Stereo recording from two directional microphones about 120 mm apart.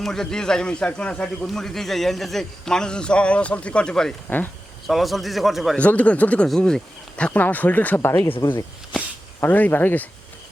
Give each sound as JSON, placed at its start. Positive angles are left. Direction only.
{"t": 0.0, "sound": "speech", "side_deg": 5}
{"t": 5.8, "sound": "speech", "side_deg": 10}